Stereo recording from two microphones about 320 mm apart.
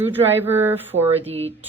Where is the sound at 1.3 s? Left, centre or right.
Centre.